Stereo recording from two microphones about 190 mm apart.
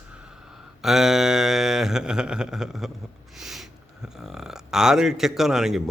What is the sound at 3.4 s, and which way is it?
A man's voice, centre (ahead or behind).